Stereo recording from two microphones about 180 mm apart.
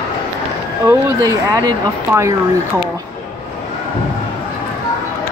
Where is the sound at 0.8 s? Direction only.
15° right (ahead or behind).